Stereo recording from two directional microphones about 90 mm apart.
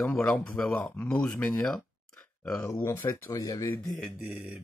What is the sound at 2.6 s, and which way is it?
Speech, 25° left (ahead or behind).